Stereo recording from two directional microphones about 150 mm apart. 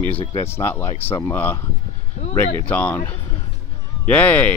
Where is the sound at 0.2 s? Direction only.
35° left (ahead or behind).